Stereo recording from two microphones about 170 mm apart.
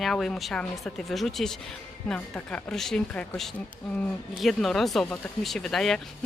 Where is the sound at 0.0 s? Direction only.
Centre (ahead or behind).